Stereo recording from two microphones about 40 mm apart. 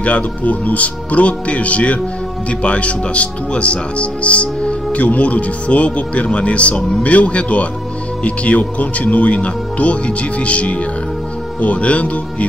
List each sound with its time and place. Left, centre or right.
0.0 s speech: left